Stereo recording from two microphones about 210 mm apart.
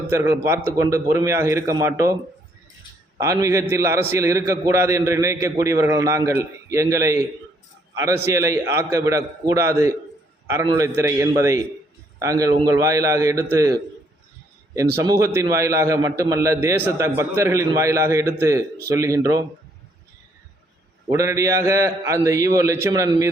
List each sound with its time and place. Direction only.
0.1 s a man's voice: 10° right (ahead or behind)
3.2 s a man's voice: 15° right (ahead or behind)
15.0 s a man's voice: 15° right (ahead or behind)
21.1 s a man's voice: 15° right (ahead or behind)